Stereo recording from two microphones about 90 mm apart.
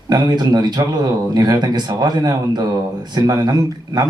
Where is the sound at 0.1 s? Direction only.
50° right (ahead or behind).